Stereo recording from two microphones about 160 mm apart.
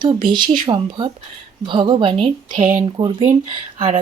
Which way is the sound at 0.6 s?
30° right (ahead or behind).